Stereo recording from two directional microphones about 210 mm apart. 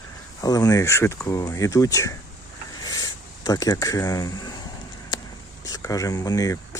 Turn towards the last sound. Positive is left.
turn(degrees=15)  # may be behind; listen again after turning